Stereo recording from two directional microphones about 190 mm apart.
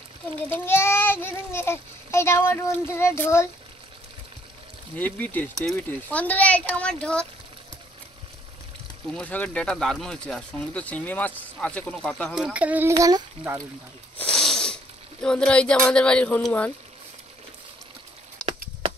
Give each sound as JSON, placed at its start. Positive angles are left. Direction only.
{"t": 0.4, "sound": "speech", "side_deg": 10}
{"t": 4.9, "sound": "speech", "side_deg": 10}
{"t": 9.1, "sound": "speech", "side_deg": 10}
{"t": 14.1, "sound": "wheeze", "side_deg": 5}
{"t": 15.2, "sound": "speech", "side_deg": 5}